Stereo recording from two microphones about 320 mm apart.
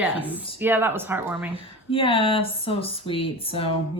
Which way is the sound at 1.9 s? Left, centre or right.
Centre.